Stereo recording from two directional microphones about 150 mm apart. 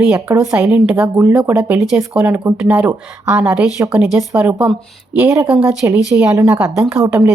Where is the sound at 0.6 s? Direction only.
10° right (ahead or behind).